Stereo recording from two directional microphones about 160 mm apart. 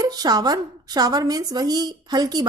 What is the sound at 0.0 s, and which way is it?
A woman's voice, 25° right (ahead or behind).